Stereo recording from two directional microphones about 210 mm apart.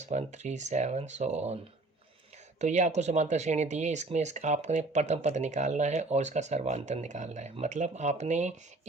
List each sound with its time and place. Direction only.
0.0 s speech: 35° right (ahead or behind)
2.6 s speech: 35° right (ahead or behind)